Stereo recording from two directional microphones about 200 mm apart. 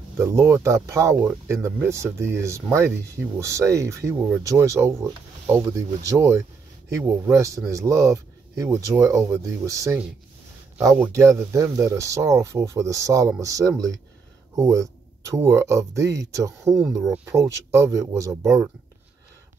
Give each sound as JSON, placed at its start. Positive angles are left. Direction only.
{"t": 0.2, "sound": "speech", "side_deg": -10}
{"t": 11.1, "sound": "speech", "side_deg": -15}
{"t": 18.4, "sound": "speech", "side_deg": 0}